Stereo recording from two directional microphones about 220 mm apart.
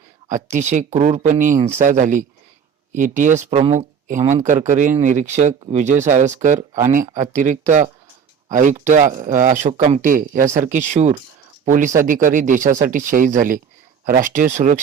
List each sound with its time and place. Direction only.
0.3 s speech: 35° right (ahead or behind)